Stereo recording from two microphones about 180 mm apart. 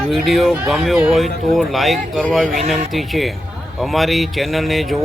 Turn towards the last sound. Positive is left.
turn(degrees=0)  # may be behind; listen again after turning